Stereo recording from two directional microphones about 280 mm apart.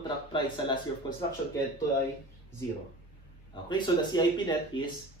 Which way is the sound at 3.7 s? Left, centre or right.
Centre.